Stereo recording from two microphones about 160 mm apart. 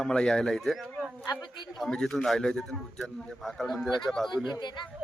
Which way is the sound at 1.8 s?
5° left (ahead or behind).